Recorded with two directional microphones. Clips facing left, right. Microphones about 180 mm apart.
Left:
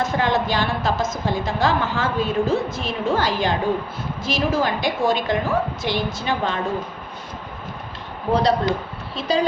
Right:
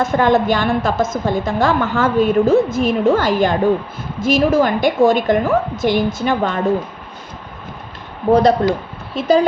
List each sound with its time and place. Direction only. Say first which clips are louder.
0.0 s a woman's voice: right 6 dB; 50° right (ahead or behind)
8.3 s a woman's voice: right 6 dB; 50° right (ahead or behind)